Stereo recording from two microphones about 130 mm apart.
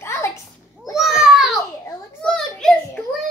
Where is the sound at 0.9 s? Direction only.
Centre (ahead or behind).